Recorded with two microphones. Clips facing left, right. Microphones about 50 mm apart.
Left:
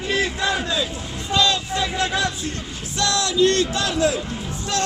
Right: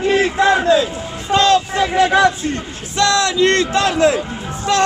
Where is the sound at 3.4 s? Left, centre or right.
Right.